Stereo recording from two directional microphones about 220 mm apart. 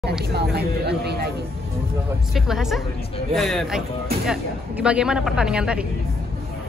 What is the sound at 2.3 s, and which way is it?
A woman's voice, centre (ahead or behind).